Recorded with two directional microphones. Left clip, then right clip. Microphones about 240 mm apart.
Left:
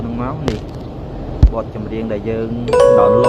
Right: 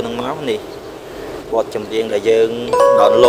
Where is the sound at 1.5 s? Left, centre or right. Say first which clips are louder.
Right 9 dB; right.